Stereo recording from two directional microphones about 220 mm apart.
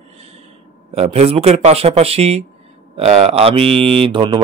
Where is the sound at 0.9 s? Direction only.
30° right (ahead or behind).